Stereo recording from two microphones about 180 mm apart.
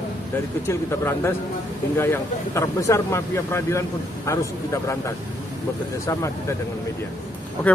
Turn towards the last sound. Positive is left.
turn(degrees=10)  # may be behind; listen again after turning